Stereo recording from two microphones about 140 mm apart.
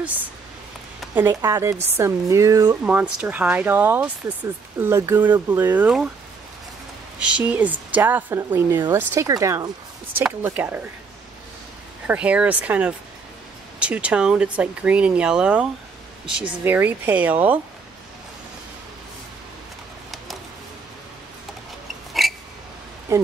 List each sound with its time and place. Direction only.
0.0 s speech: 10° right (ahead or behind)
2.8 s speech: 10° right (ahead or behind)
7.2 s speech: 10° right (ahead or behind); by 9.7 s 25° right (ahead or behind)
10.1 s speech: 10° right (ahead or behind)
12.1 s speech: 10° right (ahead or behind)
22.2 s a sound: centre (ahead or behind)
23.1 s a sound: 20° right (ahead or behind)